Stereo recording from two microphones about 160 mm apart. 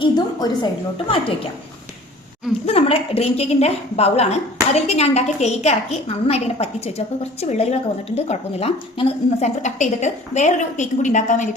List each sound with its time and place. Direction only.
0.0 s a woman's voice: 25° left (ahead or behind)
2.6 s a woman's voice: 40° left (ahead or behind)